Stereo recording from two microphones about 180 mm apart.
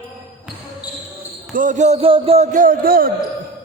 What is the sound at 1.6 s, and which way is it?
Speech, 45° right (ahead or behind).